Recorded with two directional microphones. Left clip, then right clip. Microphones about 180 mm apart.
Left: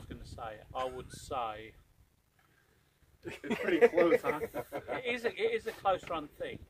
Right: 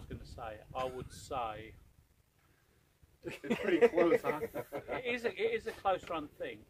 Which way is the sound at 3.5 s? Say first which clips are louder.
Left 2 dB; 45° left (ahead or behind).